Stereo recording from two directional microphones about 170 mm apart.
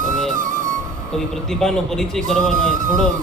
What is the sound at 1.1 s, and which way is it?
Speech, centre (ahead or behind).